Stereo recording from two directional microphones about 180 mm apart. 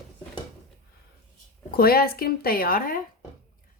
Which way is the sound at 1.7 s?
55° left (ahead or behind).